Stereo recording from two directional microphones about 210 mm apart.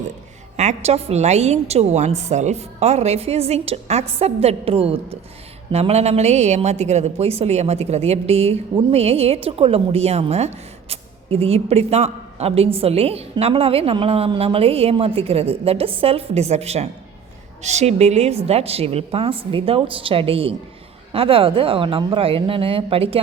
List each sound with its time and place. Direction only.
0.5 s a woman's voice: 35° right (ahead or behind)